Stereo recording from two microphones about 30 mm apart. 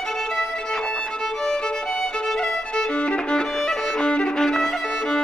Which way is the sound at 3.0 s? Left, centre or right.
Left.